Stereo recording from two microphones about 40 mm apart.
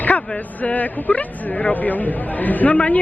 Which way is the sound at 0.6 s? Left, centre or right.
Left.